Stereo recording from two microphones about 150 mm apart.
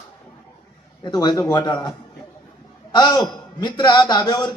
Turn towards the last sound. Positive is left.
turn(degrees=25)  # may be behind; listen again after turning